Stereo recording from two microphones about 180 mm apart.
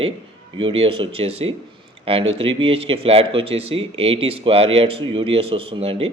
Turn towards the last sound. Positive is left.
turn(degrees=-35)  # may be behind; listen again after turning